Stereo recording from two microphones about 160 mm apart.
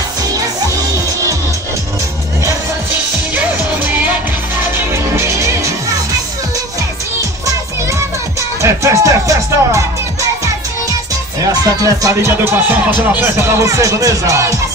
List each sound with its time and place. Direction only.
3.3 s music: 10° right (ahead or behind)
8.4 s music: 20° right (ahead or behind)
11.4 s speech: 20° right (ahead or behind)